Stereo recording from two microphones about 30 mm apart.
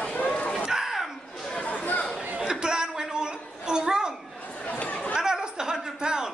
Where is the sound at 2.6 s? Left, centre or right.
Right.